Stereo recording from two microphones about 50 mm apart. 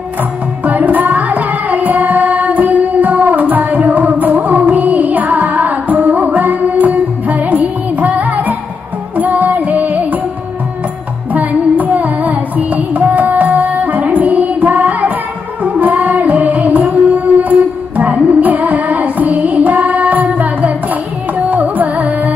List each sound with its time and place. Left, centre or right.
0.7 s music: right
11.3 s carnatic music: right
15.6 s music: right
21.5 s carnatic music: right